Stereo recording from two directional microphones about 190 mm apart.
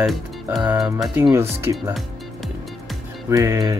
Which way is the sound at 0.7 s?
20° right (ahead or behind).